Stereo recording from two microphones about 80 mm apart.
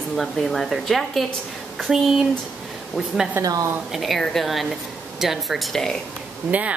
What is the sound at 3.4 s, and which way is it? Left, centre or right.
Speech, right.